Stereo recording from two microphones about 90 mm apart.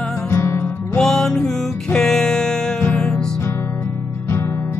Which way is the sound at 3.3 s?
30° left (ahead or behind).